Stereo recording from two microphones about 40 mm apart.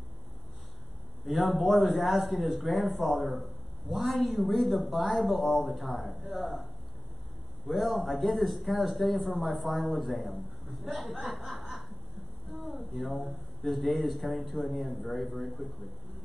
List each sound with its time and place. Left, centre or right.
1.2 s speech: centre
7.6 s speech: centre
10.9 s chuckle: centre
12.4 s a sound: centre
13.7 s speech: centre